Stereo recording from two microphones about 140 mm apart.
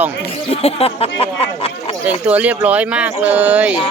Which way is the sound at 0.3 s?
45° left (ahead or behind).